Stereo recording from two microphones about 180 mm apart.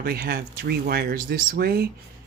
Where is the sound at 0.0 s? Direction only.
60° right (ahead or behind).